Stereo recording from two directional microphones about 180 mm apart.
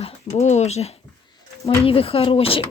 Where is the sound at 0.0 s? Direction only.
35° left (ahead or behind).